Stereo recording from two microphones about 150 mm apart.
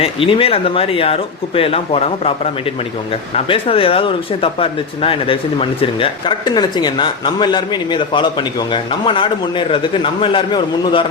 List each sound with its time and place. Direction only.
0.0 s speech: 40° left (ahead or behind)